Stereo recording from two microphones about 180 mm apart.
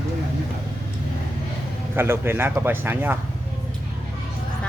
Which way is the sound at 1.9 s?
15° right (ahead or behind).